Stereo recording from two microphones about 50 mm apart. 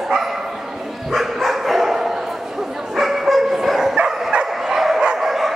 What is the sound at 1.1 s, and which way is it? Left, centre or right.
Dog, centre.